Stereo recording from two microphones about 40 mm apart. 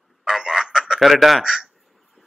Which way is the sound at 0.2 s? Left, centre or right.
Centre.